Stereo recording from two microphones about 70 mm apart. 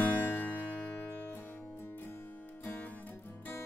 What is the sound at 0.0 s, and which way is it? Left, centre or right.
Music, left.